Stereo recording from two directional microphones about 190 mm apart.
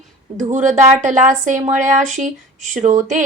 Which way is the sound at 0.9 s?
40° right (ahead or behind).